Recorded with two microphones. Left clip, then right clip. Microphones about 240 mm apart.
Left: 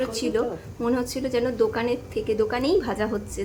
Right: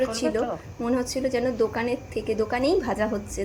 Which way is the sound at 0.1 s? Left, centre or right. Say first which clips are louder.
Even; centre.